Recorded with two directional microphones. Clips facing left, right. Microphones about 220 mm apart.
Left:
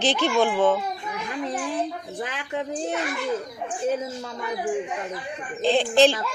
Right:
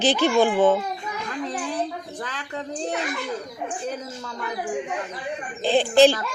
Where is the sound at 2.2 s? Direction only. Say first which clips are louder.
Left 3 dB; 15° left (ahead or behind).